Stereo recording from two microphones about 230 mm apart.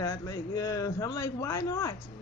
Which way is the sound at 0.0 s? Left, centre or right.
Centre.